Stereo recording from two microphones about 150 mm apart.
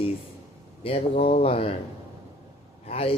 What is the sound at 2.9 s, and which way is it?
Speech, 40° left (ahead or behind).